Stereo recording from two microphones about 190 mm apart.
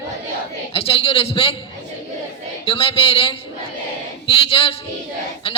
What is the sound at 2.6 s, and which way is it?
A woman's voice, 30° left (ahead or behind).